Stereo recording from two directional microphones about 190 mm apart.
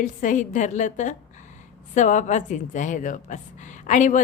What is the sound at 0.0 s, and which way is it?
A woman's voice, 45° left (ahead or behind).